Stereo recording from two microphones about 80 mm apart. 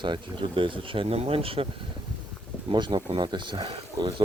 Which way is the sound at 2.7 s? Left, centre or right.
Right.